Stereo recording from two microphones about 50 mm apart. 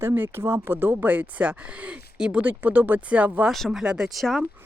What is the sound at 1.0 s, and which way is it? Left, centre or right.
Speech, right.